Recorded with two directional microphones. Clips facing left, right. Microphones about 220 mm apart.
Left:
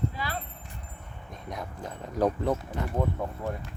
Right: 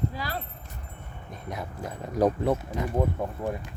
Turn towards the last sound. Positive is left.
turn(degrees=-15)  # may be behind; listen again after turning